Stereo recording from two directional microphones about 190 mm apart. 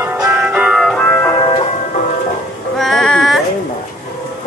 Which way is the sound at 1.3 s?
30° left (ahead or behind).